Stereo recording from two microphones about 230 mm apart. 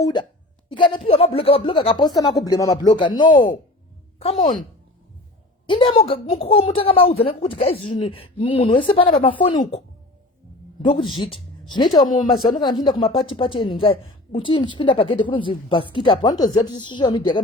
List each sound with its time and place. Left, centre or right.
0.0 s speech: centre
5.6 s speech: left
11.2 s speech: left